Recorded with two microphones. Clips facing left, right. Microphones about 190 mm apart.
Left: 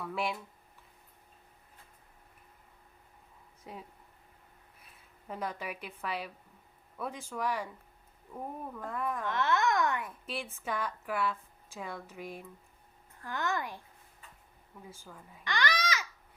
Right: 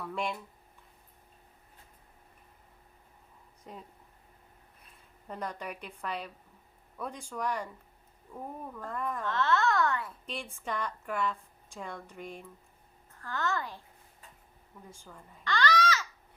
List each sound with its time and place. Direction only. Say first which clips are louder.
0.0 s speech: even; 5° left (ahead or behind)
3.6 s speech: left 1 dB; 5° left (ahead or behind)
5.3 s speech: even; 5° left (ahead or behind)
8.9 s speech: even; 5° left (ahead or behind)
9.2 s a child's voice: right 2 dB; 15° left (ahead or behind)
10.2 s speech: left 1 dB; 5° left (ahead or behind)
13.2 s a child's voice: right 1 dB; 15° left (ahead or behind)
14.8 s speech: left 1 dB; 5° left (ahead or behind)
15.4 s babbling: right 5 dB; 15° left (ahead or behind)